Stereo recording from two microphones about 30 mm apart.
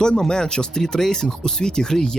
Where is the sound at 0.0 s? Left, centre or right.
Left.